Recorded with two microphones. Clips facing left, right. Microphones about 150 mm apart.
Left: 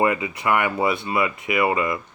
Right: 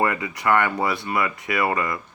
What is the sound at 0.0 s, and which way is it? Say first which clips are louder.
Speech: left 2 dB; 20° left (ahead or behind).